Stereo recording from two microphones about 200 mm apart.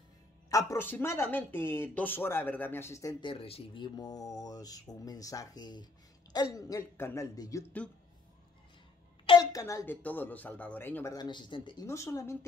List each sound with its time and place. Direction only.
0.5 s speech: 15° left (ahead or behind)
9.2 s speech: 20° left (ahead or behind)